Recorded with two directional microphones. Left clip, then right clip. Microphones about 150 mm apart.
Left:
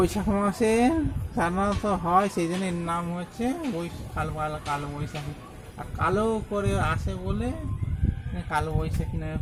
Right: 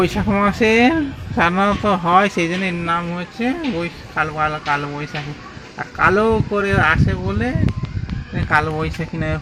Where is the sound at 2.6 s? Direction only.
20° left (ahead or behind).